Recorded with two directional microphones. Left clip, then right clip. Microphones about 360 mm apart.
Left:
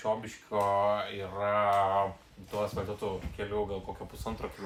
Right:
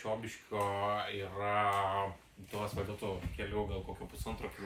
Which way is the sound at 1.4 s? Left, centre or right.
Centre.